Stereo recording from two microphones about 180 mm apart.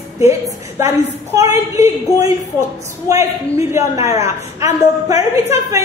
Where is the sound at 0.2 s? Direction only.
15° right (ahead or behind).